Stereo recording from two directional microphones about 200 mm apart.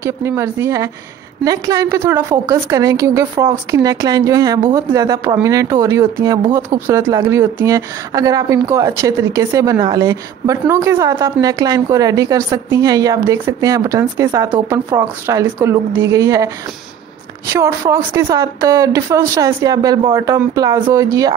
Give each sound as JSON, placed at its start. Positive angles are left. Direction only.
{"t": 0.0, "sound": "a woman's voice", "side_deg": -15}
{"t": 17.5, "sound": "a woman's voice", "side_deg": -15}